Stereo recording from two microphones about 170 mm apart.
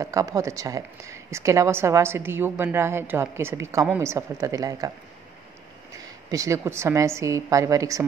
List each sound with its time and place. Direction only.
0.0 s a woman's voice: 20° right (ahead or behind)
6.3 s a woman's voice: 20° right (ahead or behind)